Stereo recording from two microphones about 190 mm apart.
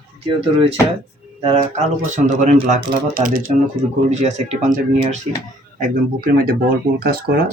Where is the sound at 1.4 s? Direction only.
35° right (ahead or behind).